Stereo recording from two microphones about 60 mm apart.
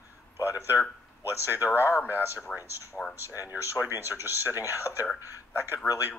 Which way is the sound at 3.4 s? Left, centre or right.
Right.